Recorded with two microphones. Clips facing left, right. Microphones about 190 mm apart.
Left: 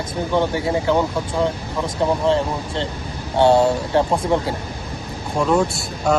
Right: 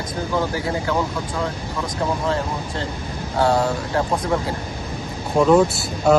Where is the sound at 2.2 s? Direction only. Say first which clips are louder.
Left 4 dB; 25° left (ahead or behind).